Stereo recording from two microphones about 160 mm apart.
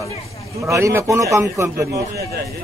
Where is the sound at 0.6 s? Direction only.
15° right (ahead or behind).